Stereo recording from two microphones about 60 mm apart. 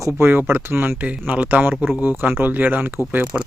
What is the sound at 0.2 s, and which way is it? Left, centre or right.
Speech, right.